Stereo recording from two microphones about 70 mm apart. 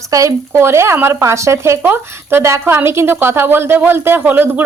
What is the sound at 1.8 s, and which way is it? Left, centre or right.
Speech, right.